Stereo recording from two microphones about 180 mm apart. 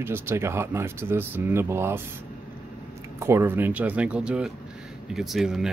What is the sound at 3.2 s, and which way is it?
Speech, 15° right (ahead or behind).